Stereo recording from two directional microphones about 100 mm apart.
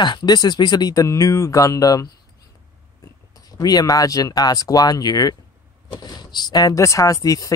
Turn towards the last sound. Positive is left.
turn(degrees=35)  # may be behind; listen again after turning